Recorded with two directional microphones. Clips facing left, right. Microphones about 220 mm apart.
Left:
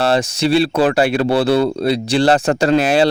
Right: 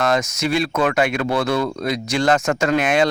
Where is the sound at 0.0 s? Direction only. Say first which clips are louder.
Left 4 dB; 30° left (ahead or behind).